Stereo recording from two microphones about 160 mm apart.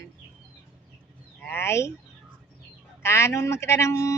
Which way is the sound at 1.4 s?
15° left (ahead or behind).